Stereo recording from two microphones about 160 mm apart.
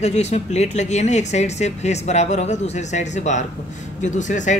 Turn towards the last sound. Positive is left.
turn(degrees=50)  # may be behind; listen again after turning